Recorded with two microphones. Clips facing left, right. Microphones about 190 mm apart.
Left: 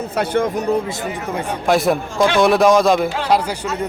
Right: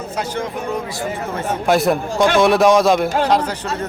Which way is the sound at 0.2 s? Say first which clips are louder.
Left 6 dB; 50° left (ahead or behind).